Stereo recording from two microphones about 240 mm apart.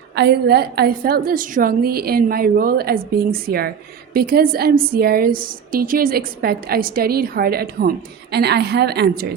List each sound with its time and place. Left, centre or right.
0.2 s a woman's voice: right